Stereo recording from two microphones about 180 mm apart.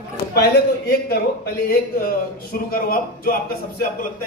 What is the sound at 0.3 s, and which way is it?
A man's voice, 60° left (ahead or behind).